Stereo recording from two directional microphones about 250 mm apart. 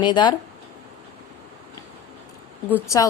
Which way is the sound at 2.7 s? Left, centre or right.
Centre.